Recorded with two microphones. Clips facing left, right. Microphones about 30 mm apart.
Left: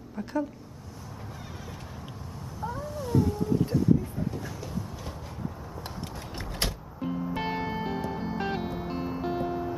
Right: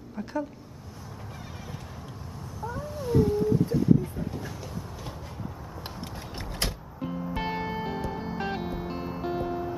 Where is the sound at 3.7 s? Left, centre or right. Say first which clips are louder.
Right 1 dB; centre.